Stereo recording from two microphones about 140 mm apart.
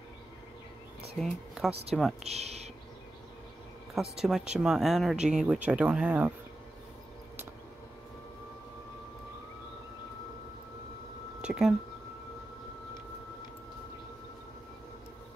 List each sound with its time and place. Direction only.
1.2 s speech: centre (ahead or behind)
2.2 s speech: 50° right (ahead or behind)
3.9 s speech: centre (ahead or behind)
11.4 s speech: 5° right (ahead or behind)